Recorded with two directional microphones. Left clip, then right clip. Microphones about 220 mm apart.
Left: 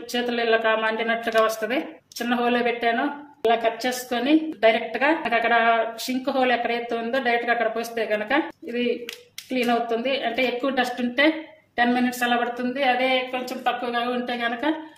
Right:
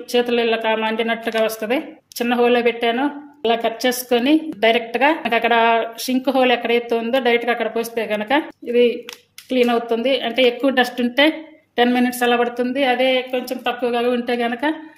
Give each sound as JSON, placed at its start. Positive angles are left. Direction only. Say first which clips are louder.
{"t": 0.1, "sound": "speech", "louder": "right 5 dB", "side_deg": -35}